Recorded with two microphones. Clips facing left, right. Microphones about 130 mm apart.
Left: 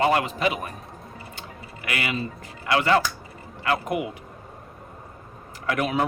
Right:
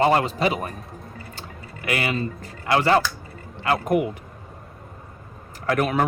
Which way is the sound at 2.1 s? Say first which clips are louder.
Right 3 dB; 35° right (ahead or behind).